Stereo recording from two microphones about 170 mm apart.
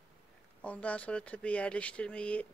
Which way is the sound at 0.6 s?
10° left (ahead or behind).